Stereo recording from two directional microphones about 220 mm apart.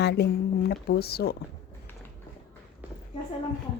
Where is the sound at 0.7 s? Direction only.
45° left (ahead or behind).